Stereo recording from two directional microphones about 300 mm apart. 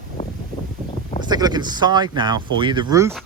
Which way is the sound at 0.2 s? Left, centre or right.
Left.